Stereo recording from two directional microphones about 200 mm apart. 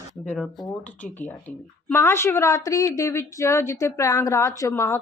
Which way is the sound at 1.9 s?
10° left (ahead or behind).